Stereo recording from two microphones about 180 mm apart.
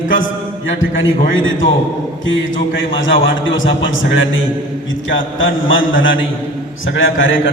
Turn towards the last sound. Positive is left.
turn(degrees=90)